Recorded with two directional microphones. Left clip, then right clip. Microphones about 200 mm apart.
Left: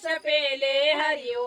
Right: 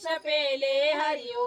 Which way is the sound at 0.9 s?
50° left (ahead or behind).